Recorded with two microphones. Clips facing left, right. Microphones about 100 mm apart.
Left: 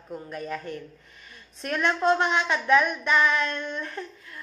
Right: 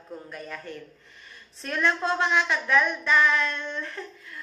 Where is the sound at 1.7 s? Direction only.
20° left (ahead or behind).